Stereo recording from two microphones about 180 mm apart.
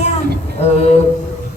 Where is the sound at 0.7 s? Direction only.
35° left (ahead or behind).